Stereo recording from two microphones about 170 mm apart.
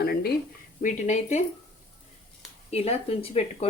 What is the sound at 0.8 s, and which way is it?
Speech, 45° left (ahead or behind).